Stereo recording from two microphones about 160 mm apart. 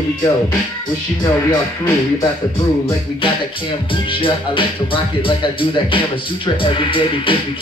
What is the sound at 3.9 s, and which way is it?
Speech, 35° left (ahead or behind).